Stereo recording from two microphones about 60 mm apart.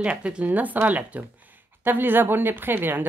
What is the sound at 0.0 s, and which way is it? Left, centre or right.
Speech, centre.